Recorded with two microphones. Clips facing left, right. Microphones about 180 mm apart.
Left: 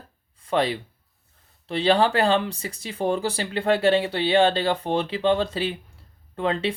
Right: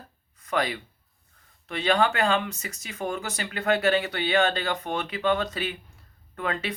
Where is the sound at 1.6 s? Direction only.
30° left (ahead or behind).